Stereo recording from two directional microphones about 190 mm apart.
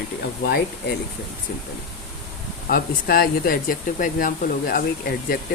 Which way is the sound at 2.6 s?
50° left (ahead or behind).